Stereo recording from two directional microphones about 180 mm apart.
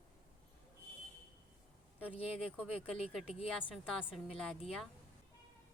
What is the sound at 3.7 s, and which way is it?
Speech, centre (ahead or behind).